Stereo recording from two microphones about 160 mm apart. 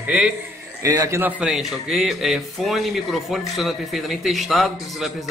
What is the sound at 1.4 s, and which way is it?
Speech, 5° right (ahead or behind).